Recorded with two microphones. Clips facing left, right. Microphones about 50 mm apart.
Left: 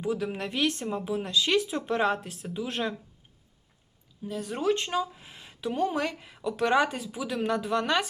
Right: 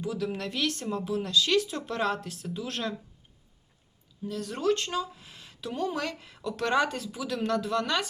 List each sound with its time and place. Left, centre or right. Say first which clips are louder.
0.0 s speech: left 2 dB; left
4.3 s speech: even; centre